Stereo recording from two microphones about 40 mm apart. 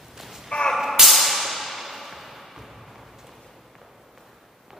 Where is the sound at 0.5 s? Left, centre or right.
Left.